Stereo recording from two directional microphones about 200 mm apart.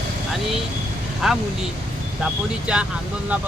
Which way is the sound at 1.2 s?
Centre (ahead or behind).